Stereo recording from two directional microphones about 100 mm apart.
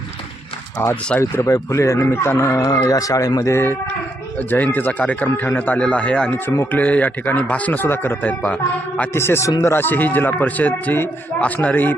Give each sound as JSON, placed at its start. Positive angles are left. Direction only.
{"t": 1.2, "sound": "speech", "side_deg": 30}
{"t": 2.6, "sound": "speech", "side_deg": 35}
{"t": 3.5, "sound": "a man's voice", "side_deg": 20}
{"t": 9.7, "sound": "a man's voice", "side_deg": 20}